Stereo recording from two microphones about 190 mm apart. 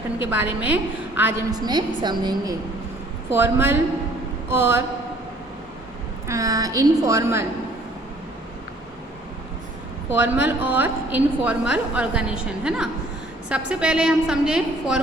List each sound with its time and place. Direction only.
0.3 s a woman's voice: 10° right (ahead or behind)
3.2 s a woman's voice: 10° right (ahead or behind)
6.2 s a woman's voice: 15° right (ahead or behind)
10.1 s a woman's voice: 10° right (ahead or behind)